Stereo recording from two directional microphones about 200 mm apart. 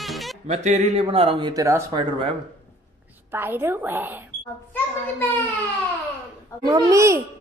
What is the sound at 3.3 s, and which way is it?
Speech, 10° right (ahead or behind).